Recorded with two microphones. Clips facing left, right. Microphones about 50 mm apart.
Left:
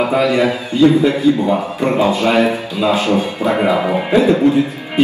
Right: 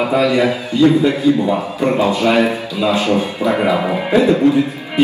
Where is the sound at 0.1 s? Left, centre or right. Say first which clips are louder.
Even; left.